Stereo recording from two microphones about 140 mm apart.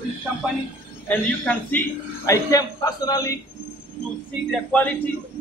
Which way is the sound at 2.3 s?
25° left (ahead or behind).